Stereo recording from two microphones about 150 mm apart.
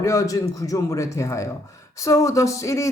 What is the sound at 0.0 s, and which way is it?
Speech, 20° left (ahead or behind).